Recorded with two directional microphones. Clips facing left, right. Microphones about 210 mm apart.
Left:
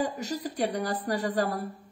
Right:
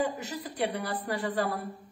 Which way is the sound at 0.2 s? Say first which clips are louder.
Left 3 dB; 40° left (ahead or behind).